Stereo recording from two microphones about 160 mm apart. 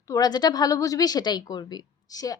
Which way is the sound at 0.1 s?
25° left (ahead or behind).